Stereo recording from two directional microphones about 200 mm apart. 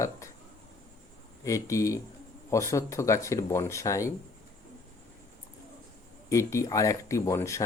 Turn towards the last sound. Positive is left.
turn(degrees=15)  # may be behind; listen again after turning